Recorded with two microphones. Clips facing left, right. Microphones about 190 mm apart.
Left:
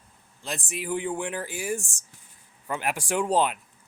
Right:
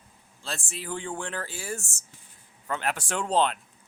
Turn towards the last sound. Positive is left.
turn(degrees=10)  # may be behind; listen again after turning